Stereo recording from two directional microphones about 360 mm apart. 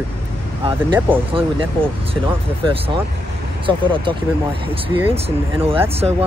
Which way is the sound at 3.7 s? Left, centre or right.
Centre.